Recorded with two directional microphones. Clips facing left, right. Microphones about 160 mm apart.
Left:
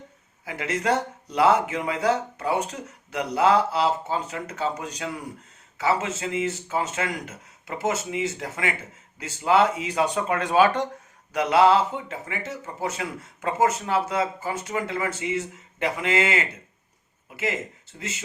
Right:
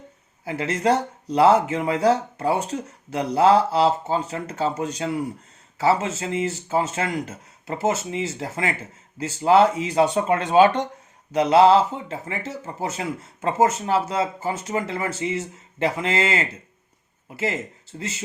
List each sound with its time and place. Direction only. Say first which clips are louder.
0.4 s speech: right 4 dB; 30° right (ahead or behind)